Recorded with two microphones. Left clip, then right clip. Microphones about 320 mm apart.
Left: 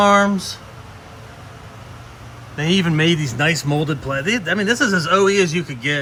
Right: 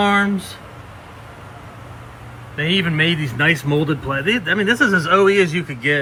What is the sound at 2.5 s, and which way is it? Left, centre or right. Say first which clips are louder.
Speech: right 1 dB; centre.